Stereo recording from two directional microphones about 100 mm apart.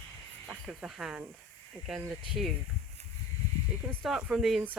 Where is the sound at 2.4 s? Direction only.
Centre (ahead or behind).